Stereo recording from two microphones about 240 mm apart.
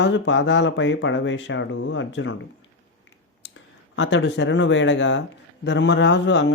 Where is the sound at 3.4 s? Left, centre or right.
Left.